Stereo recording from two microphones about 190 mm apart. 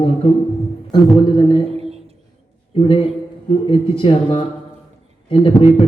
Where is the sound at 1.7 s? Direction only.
35° right (ahead or behind).